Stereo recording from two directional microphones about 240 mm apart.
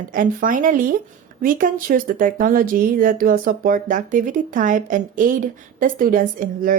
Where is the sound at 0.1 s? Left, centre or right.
Right.